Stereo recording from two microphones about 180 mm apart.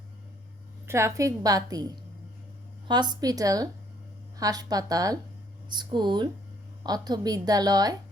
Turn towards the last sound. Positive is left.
turn(degrees=-20)  # may be behind; listen again after turning